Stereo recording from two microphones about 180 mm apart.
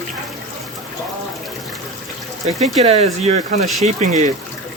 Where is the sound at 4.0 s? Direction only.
40° right (ahead or behind).